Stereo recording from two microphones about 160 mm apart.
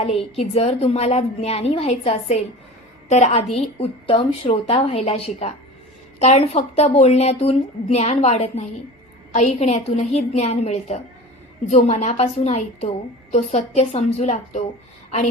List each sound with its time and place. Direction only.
0.0 s a woman's voice: 40° left (ahead or behind)